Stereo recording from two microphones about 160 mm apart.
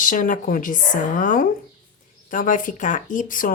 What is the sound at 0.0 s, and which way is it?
Speech, 55° left (ahead or behind).